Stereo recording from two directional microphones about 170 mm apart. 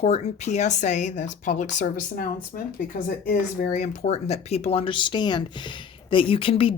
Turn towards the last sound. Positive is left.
turn(degrees=30)  # may be behind; listen again after turning